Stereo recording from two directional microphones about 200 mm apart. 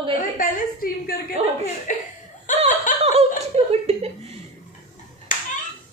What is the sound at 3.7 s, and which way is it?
Chuckle, 30° right (ahead or behind).